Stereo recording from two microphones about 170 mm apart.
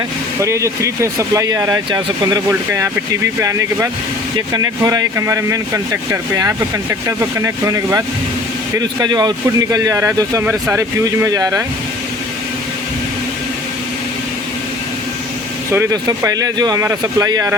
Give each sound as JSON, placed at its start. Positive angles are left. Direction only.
{"t": 0.3, "sound": "speech", "side_deg": -15}
{"t": 15.7, "sound": "speech", "side_deg": -20}